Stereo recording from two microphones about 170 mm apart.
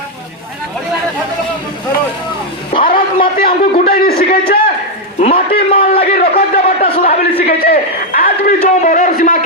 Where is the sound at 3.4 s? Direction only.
60° left (ahead or behind).